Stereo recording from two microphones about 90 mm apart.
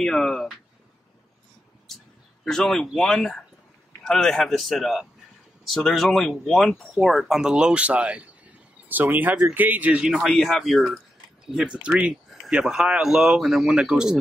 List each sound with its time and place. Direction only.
0.0 s speech: 5° left (ahead or behind)
2.4 s speech: 5° left (ahead or behind); by 10.1 s 15° right (ahead or behind)
10.1 s speech: centre (ahead or behind)